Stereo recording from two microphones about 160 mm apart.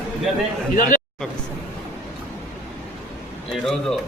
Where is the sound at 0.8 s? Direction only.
55° left (ahead or behind).